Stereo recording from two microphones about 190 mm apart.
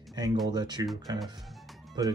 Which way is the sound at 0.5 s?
20° right (ahead or behind).